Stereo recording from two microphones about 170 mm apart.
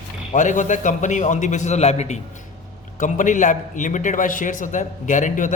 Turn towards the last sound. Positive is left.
turn(degrees=50)  # may be behind; listen again after turning